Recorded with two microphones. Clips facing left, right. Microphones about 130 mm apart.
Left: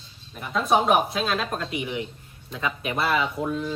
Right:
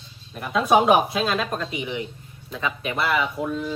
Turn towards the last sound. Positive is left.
turn(degrees=0)  # may be behind; listen again after turning